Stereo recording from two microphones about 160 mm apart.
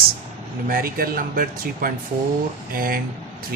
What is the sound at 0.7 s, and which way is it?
Speech, 65° right (ahead or behind).